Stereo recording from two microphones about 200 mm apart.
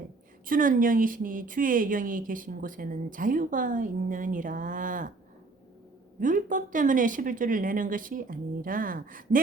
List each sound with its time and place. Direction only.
0.4 s a woman's voice: 45° right (ahead or behind)
6.1 s speech: 40° right (ahead or behind)